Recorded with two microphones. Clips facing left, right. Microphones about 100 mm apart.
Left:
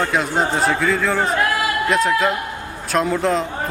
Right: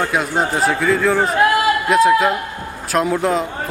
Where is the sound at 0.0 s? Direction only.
5° right (ahead or behind).